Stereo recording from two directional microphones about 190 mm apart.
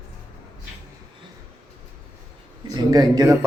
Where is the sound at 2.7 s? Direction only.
20° right (ahead or behind).